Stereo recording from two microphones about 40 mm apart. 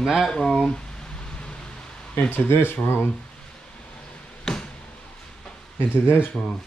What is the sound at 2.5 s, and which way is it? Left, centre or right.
Speech, left.